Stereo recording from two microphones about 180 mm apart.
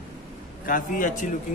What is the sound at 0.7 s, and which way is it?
Speech, 50° left (ahead or behind).